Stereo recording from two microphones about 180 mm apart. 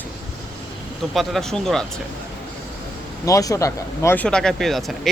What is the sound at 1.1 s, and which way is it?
Speech, centre (ahead or behind).